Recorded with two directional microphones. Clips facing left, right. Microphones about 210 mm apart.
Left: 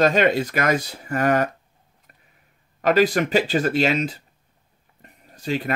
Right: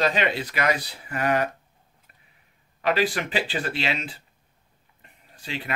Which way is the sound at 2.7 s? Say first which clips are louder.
Left 6 dB; 45° left (ahead or behind).